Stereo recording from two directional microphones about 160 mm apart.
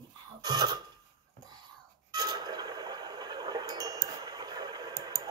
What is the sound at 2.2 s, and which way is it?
Wind chime, 25° right (ahead or behind).